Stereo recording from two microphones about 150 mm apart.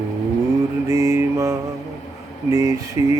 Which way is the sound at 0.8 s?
20° right (ahead or behind).